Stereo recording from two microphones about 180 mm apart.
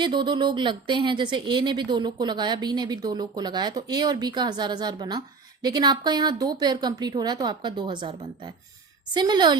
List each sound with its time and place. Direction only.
0.0 s speech: 25° right (ahead or behind)